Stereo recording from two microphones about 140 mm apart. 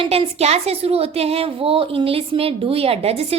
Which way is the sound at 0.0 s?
45° right (ahead or behind).